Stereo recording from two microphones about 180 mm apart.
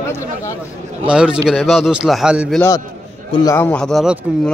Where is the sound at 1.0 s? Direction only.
5° right (ahead or behind).